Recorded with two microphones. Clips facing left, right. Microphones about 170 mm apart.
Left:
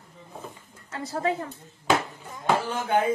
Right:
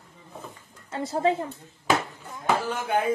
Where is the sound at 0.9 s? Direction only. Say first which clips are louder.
Right 3 dB; 25° right (ahead or behind).